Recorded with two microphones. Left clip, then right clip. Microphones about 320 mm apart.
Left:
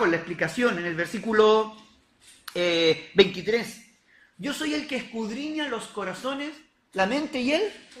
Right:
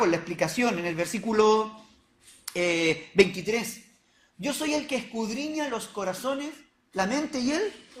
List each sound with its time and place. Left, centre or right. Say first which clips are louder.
0.0 s speech: left 1 dB; centre